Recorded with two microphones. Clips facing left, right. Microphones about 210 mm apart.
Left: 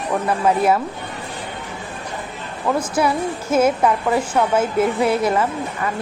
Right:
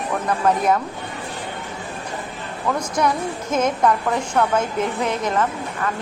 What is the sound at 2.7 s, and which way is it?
A woman's voice, 5° left (ahead or behind).